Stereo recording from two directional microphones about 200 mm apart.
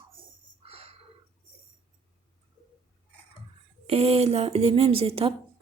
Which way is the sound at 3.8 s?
30° right (ahead or behind).